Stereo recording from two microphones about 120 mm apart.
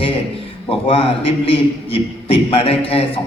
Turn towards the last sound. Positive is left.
turn(degrees=50)  # may be behind; listen again after turning